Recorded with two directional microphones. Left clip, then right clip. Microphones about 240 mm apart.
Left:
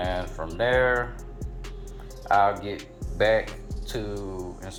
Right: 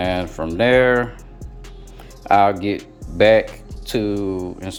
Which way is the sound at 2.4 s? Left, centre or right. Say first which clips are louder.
Right 7 dB; right.